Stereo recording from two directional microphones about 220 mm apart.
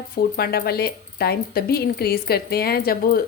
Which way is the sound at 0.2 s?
45° left (ahead or behind).